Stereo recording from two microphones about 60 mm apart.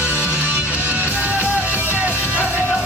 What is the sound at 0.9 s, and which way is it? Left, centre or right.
Music, right.